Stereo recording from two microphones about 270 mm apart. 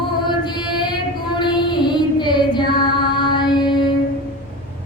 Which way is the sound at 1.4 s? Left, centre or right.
Centre.